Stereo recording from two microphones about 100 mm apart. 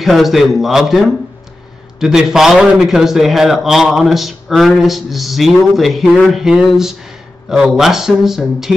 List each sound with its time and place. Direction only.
0.0 s a man's voice: centre (ahead or behind)